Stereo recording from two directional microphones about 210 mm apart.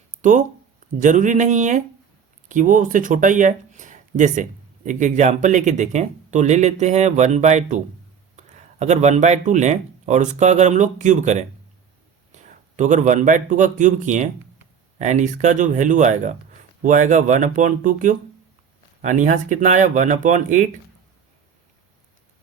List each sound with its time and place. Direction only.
0.2 s a man's voice: 35° right (ahead or behind)